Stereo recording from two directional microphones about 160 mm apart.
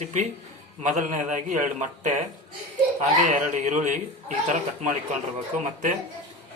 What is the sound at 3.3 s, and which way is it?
Speech, 50° right (ahead or behind).